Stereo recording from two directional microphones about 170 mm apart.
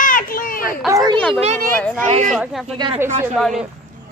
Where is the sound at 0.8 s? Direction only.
20° right (ahead or behind).